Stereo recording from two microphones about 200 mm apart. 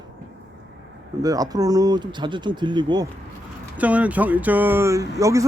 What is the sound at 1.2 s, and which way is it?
Speech, 20° right (ahead or behind).